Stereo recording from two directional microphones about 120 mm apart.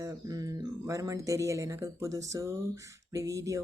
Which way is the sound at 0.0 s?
30° right (ahead or behind).